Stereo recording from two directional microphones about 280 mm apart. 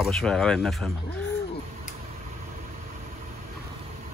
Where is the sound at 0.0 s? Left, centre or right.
Centre.